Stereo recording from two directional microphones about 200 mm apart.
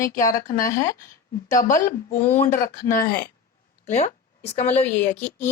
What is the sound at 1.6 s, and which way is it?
Speech, 40° left (ahead or behind).